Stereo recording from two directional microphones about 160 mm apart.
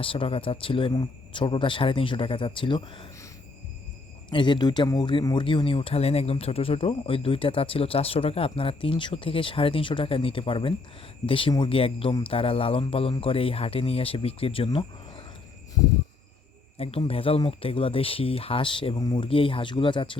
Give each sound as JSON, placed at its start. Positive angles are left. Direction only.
{"t": 0.0, "sound": "speech", "side_deg": 35}
{"t": 4.3, "sound": "speech", "side_deg": 30}
{"t": 16.7, "sound": "speech", "side_deg": 40}